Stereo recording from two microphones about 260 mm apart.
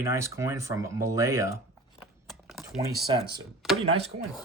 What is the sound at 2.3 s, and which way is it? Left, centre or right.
Typing, centre.